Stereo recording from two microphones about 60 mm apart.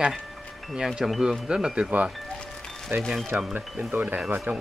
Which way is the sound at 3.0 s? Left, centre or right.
Centre.